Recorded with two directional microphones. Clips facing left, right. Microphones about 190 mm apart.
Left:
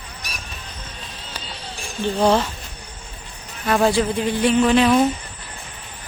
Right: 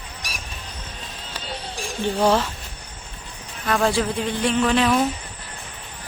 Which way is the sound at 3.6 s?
5° left (ahead or behind).